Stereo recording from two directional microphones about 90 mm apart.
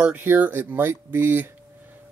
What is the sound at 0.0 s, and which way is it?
Speech, 20° right (ahead or behind).